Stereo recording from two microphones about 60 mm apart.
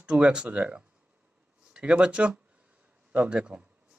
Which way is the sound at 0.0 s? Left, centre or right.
Centre.